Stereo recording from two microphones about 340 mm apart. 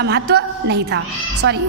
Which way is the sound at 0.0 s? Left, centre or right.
Right.